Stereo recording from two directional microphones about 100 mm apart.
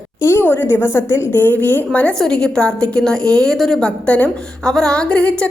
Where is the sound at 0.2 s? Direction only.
25° left (ahead or behind).